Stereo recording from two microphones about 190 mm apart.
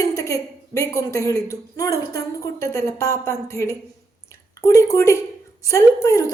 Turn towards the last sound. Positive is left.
turn(degrees=15)  # may be behind; listen again after turning